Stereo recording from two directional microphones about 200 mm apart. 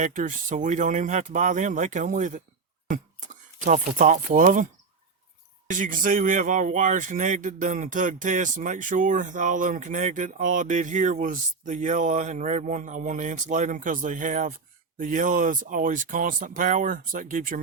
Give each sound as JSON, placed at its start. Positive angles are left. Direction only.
{"t": 0.0, "sound": "speech", "side_deg": -40}